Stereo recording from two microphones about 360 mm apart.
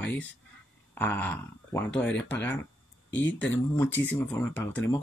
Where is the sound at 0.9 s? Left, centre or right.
Centre.